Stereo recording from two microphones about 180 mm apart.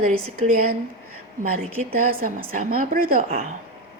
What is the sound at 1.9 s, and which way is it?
A woman's voice, 50° right (ahead or behind).